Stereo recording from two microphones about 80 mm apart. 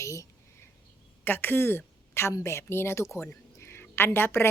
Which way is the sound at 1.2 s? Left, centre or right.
Left.